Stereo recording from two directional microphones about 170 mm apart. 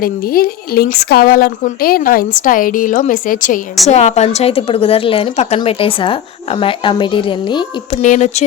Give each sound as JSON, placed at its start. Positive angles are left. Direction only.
{"t": 0.0, "sound": "a woman's voice", "side_deg": 60}
{"t": 3.8, "sound": "a woman's voice", "side_deg": 40}
{"t": 8.0, "sound": "speech", "side_deg": 45}